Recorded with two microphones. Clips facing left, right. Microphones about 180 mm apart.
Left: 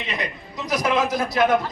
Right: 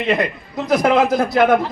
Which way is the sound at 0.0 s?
55° right (ahead or behind).